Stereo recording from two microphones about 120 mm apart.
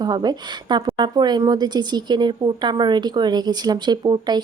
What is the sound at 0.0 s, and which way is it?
A woman's voice, 35° right (ahead or behind).